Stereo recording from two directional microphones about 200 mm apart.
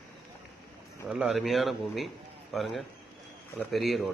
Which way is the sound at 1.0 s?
Centre (ahead or behind).